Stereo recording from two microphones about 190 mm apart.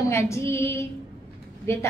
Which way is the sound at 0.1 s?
15° left (ahead or behind).